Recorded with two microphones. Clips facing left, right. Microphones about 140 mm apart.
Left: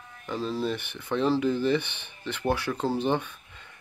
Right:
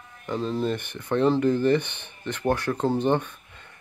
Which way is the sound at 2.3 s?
10° left (ahead or behind).